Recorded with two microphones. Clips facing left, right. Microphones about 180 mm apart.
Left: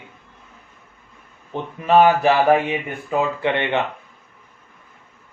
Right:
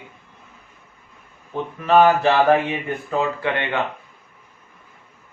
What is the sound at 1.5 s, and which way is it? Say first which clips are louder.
Speech: left 1 dB; 15° left (ahead or behind).